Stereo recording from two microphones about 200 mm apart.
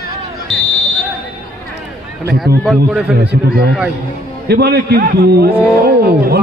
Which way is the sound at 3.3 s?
50° right (ahead or behind).